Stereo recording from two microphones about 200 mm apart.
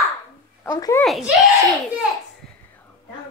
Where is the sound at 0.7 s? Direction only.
15° left (ahead or behind).